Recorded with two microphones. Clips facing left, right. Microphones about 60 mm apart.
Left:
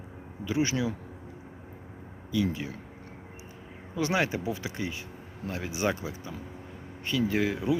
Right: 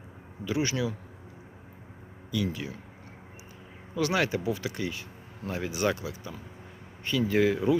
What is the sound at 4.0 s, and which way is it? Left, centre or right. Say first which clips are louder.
Speech: right 1 dB; centre.